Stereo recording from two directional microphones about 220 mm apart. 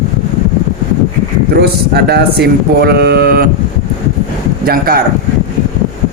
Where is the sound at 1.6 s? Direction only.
50° right (ahead or behind).